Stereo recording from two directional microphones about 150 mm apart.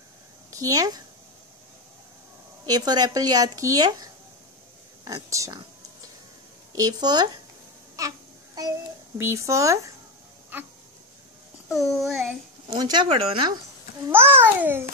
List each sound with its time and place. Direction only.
0.5 s speech: 20° right (ahead or behind)
2.6 s speech: 25° right (ahead or behind)
6.7 s speech: 25° right (ahead or behind)
9.2 s speech: 20° right (ahead or behind)
11.7 s child singing: centre (ahead or behind)
12.6 s speech: 30° right (ahead or behind)
13.2 s speech: 40° right (ahead or behind)
14.0 s a child's voice: 15° right (ahead or behind)